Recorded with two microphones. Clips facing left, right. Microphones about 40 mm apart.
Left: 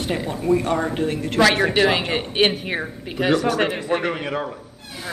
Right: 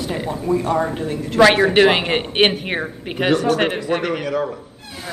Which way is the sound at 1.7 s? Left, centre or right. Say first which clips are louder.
Right 4 dB; right.